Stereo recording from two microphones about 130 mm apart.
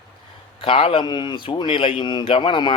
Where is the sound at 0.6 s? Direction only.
45° left (ahead or behind).